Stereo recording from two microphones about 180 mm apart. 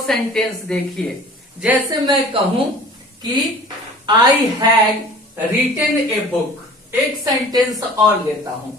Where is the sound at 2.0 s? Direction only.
30° right (ahead or behind).